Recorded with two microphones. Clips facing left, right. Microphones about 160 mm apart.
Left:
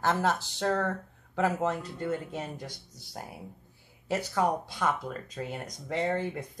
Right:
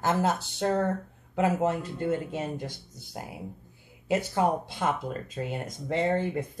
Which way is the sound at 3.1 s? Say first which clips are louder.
Right 2 dB; 10° right (ahead or behind).